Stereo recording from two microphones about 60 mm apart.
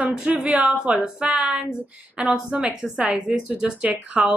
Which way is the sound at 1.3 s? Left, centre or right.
Centre.